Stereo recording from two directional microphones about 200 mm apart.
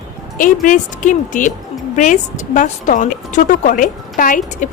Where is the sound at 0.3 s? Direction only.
40° left (ahead or behind).